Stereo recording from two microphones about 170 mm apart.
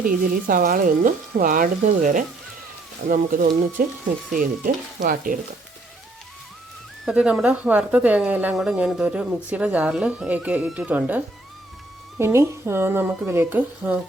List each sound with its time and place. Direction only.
0.0 s speech: 55° right (ahead or behind)
7.0 s speech: 5° right (ahead or behind)
12.2 s speech: 15° right (ahead or behind)